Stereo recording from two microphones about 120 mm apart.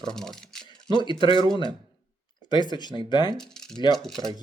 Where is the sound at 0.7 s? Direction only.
40° left (ahead or behind).